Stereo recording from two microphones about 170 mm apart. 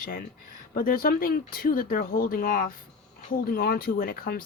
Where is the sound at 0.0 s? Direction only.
55° left (ahead or behind).